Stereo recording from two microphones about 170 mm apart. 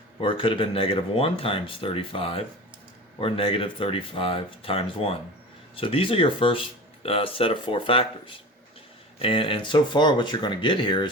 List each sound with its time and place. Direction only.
0.2 s speech: 30° left (ahead or behind)